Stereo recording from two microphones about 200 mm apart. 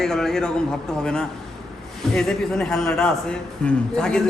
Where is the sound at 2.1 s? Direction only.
5° left (ahead or behind).